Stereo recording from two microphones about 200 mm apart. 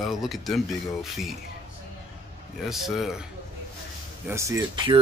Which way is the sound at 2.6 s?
Centre (ahead or behind).